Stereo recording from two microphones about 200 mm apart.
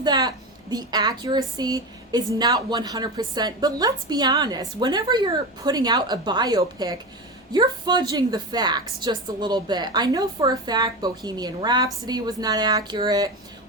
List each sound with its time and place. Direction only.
0.0 s a woman's voice: 20° right (ahead or behind)